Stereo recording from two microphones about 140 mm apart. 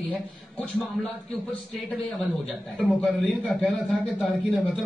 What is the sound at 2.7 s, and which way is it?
A man's voice, centre (ahead or behind).